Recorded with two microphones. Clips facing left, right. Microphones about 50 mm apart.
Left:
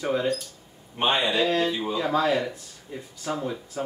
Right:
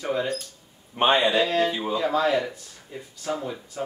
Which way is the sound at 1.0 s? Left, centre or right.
Right.